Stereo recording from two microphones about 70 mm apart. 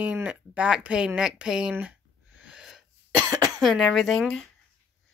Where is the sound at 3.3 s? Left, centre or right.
Right.